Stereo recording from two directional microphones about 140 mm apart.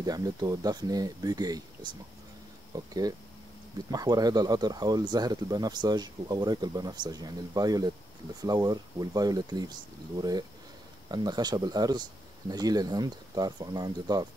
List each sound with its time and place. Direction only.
0.0 s speech: 25° right (ahead or behind)
11.1 s speech: 30° right (ahead or behind)